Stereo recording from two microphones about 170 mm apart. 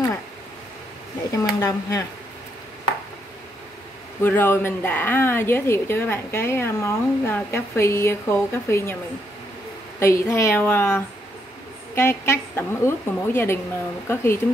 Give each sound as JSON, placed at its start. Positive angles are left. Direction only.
{"t": 1.3, "sound": "speech", "side_deg": 20}
{"t": 4.2, "sound": "a woman's voice", "side_deg": 10}
{"t": 9.9, "sound": "a woman's voice", "side_deg": 15}